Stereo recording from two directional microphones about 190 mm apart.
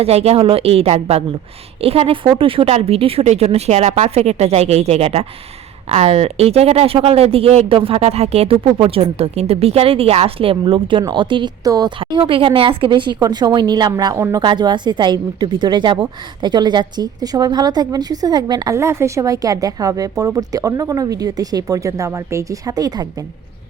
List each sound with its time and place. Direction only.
0.0 s speech: 35° right (ahead or behind)